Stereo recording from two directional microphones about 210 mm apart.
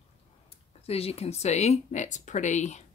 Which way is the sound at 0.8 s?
30° left (ahead or behind).